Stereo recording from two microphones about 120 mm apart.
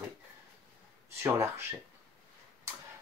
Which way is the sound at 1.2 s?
20° right (ahead or behind).